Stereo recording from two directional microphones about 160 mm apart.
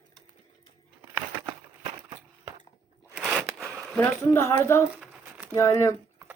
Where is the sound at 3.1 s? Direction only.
5° right (ahead or behind).